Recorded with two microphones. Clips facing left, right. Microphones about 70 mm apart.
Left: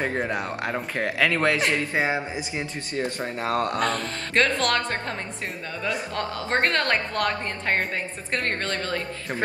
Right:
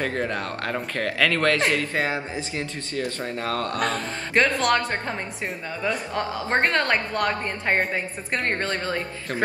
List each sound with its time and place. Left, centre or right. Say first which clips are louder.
0.0 s speech: even; centre
3.8 s speech: even; centre
6.1 s a woman's voice: right 2 dB; centre
7.9 s speech: right 1 dB; centre
8.6 s a woman's voice: right 2 dB; centre